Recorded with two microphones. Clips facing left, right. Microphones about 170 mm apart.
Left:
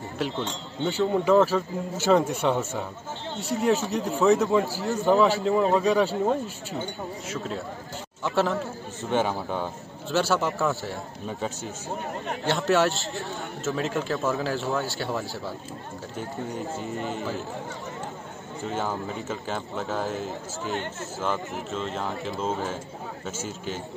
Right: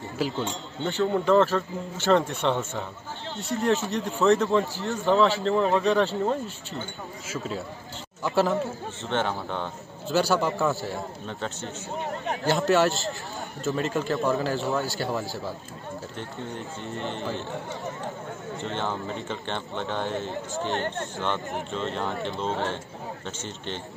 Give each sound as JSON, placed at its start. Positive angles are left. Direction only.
{"t": 0.2, "sound": "a man's voice", "side_deg": 0}
{"t": 9.1, "sound": "a man's voice", "side_deg": 10}
{"t": 16.8, "sound": "a man's voice", "side_deg": 0}
{"t": 18.6, "sound": "a man's voice", "side_deg": 5}